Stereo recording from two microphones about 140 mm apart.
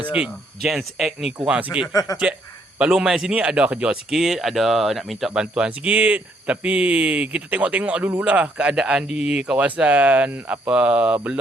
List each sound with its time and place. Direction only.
0.1 s speech: 5° right (ahead or behind)
1.9 s speech: 25° left (ahead or behind)
2.7 s speech: 5° right (ahead or behind)